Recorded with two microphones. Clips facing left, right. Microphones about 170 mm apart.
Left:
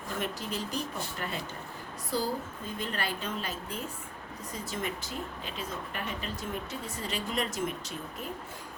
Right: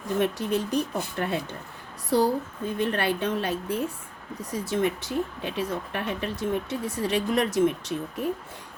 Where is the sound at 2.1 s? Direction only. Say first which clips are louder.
Right 9 dB; 65° right (ahead or behind).